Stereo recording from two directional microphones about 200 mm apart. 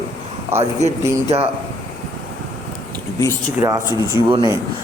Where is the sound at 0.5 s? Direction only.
10° right (ahead or behind).